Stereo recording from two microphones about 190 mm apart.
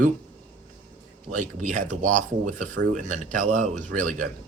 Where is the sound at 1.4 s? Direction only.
40° right (ahead or behind).